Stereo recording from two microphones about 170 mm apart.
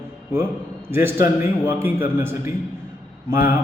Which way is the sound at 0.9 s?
15° right (ahead or behind).